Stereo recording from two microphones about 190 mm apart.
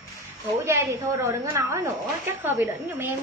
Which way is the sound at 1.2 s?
15° right (ahead or behind).